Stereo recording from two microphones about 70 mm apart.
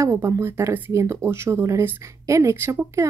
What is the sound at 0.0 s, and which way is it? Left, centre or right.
A woman's voice, right.